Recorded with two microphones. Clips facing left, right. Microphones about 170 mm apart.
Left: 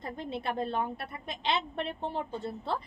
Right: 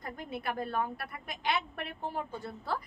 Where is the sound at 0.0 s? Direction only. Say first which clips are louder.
Left 3 dB; 25° left (ahead or behind).